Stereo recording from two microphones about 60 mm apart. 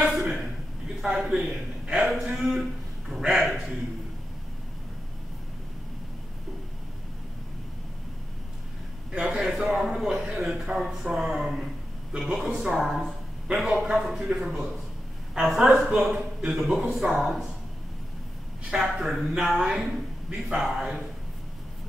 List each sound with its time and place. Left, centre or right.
0.1 s chuckle: centre
1.0 s speech: centre
9.1 s a man's voice: centre
18.7 s speech: centre
20.2 s speech: centre